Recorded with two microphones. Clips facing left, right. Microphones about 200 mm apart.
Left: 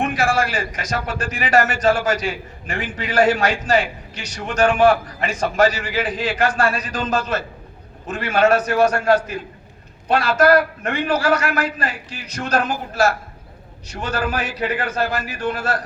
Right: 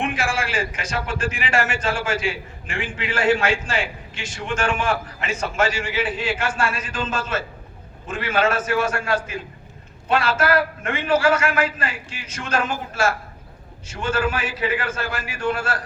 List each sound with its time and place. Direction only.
0.0 s a man's voice: 40° left (ahead or behind)